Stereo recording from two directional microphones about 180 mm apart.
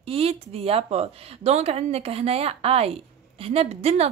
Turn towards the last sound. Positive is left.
turn(degrees=-35)  # may be behind; listen again after turning